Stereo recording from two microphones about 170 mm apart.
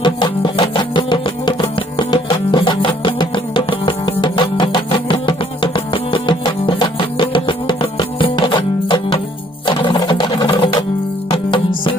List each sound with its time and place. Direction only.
0.0 s music: 25° left (ahead or behind)